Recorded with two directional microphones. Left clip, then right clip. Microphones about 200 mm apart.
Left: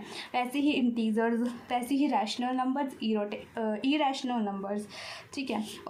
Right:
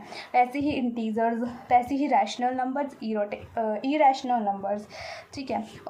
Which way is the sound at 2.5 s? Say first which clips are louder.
Right 2 dB; 50° left (ahead or behind).